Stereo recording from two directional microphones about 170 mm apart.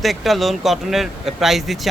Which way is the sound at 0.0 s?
Centre (ahead or behind).